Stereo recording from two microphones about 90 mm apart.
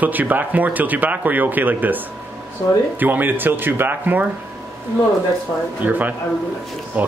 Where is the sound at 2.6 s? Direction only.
40° left (ahead or behind).